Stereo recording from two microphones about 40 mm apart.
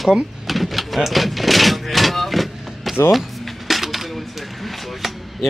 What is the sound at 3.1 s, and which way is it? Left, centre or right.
Dishes, centre.